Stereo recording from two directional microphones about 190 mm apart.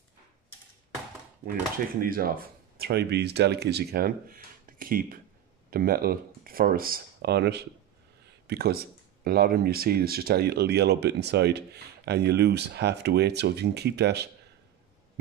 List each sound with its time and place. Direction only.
1.4 s speech: 50° right (ahead or behind)